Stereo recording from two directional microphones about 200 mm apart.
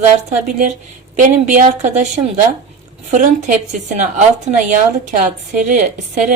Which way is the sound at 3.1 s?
35° right (ahead or behind).